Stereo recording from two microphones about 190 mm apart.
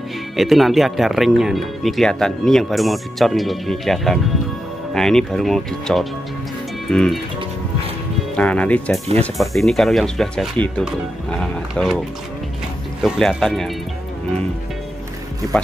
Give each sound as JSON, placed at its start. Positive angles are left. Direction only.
{"t": 0.4, "sound": "speech", "side_deg": 0}
{"t": 8.4, "sound": "speech", "side_deg": 5}
{"t": 13.0, "sound": "speech", "side_deg": 0}